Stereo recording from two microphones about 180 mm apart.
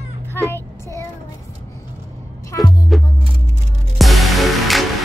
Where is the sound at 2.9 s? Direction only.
Centre (ahead or behind).